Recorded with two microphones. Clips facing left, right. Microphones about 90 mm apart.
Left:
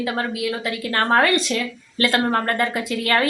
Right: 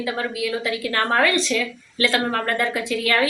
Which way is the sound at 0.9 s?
30° left (ahead or behind).